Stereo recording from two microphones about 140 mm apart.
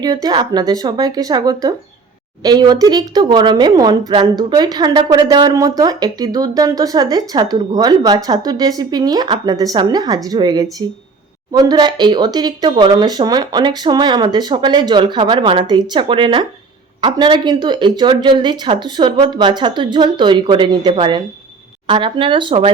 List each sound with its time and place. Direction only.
0.0 s speech: 30° right (ahead or behind)